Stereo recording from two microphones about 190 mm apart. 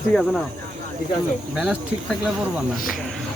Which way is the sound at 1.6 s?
5° right (ahead or behind).